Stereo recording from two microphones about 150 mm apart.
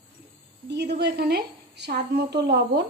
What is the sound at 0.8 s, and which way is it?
Speech, 90° right.